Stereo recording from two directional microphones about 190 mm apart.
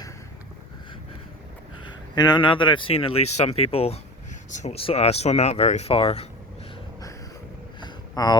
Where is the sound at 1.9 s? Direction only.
20° left (ahead or behind).